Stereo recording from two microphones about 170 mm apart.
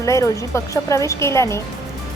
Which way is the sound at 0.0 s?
20° left (ahead or behind).